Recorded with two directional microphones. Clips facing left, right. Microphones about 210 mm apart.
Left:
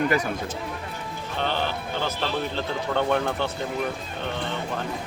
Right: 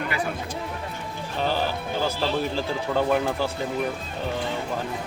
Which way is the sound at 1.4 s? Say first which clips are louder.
Right 2 dB; 5° right (ahead or behind).